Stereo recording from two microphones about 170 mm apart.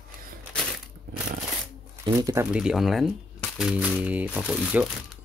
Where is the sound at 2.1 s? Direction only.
15° right (ahead or behind).